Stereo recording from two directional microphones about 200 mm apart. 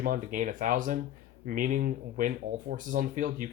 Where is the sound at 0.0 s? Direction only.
40° right (ahead or behind).